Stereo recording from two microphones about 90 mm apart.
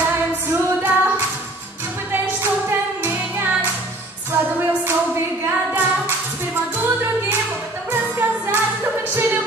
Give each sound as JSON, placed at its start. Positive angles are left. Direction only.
{"t": 0.0, "sound": "female singing", "side_deg": -25}
{"t": 3.0, "sound": "music", "side_deg": -25}
{"t": 9.1, "sound": "a sound", "side_deg": -25}